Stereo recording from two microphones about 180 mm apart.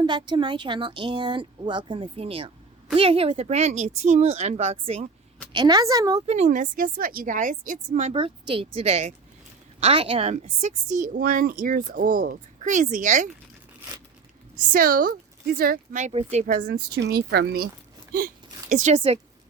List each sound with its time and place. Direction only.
0.0 s a woman's voice: 25° right (ahead or behind)
5.5 s a woman's voice: 20° right (ahead or behind)
6.2 s a woman's voice: 35° right (ahead or behind)
14.7 s a woman's voice: 55° right (ahead or behind)
16.6 s speech: 70° right (ahead or behind)
18.7 s a woman's voice: 40° right (ahead or behind)